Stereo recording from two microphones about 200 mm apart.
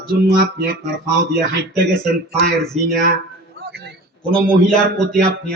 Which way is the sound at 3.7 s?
55° right (ahead or behind).